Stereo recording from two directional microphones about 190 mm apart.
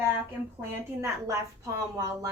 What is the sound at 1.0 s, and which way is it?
Speech, 15° right (ahead or behind).